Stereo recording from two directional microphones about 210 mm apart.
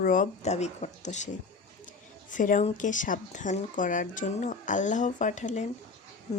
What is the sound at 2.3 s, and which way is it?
Speech, 40° left (ahead or behind).